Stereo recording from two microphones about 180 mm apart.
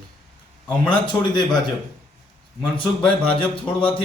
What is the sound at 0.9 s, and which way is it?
Speech, 25° left (ahead or behind).